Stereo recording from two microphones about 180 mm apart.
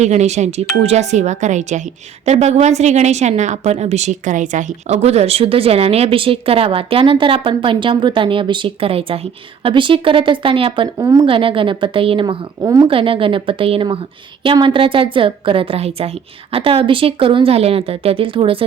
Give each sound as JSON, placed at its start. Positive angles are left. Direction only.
{"t": 0.0, "sound": "a woman's voice", "side_deg": -40}
{"t": 10.9, "sound": "a woman's voice", "side_deg": -20}
{"t": 11.3, "sound": "a woman's voice", "side_deg": -30}
{"t": 12.9, "sound": "a woman's voice", "side_deg": -30}